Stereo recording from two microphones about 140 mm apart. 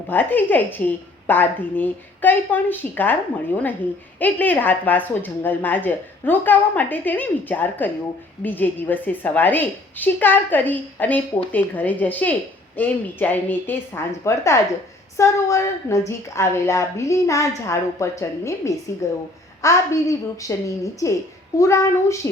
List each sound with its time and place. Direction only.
0.1 s a woman's voice: 15° left (ahead or behind)